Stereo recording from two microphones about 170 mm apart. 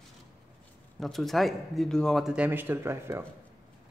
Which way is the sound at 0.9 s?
Centre (ahead or behind).